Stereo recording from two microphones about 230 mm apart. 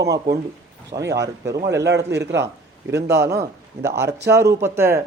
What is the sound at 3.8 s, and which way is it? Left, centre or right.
Speech, centre.